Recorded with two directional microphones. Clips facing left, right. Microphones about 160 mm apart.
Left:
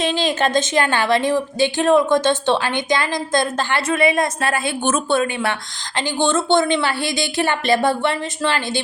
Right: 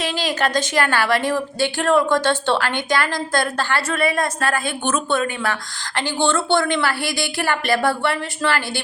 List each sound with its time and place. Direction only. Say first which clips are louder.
0.0 s a woman's voice: left 3 dB; 25° left (ahead or behind)